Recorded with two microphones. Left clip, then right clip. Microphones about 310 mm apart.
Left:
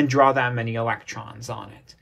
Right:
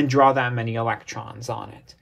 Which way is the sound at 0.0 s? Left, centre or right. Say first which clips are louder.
Even; centre.